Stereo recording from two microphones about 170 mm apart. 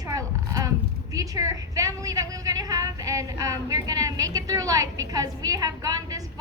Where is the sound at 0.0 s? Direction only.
20° right (ahead or behind).